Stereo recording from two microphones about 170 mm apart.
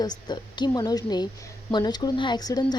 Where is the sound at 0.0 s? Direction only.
25° left (ahead or behind).